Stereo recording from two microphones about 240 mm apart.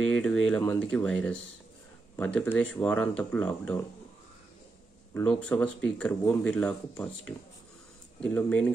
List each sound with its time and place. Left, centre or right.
0.1 s speech: centre
5.1 s speech: centre